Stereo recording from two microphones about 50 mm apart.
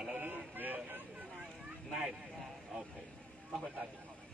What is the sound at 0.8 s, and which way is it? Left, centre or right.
Vehicle, right.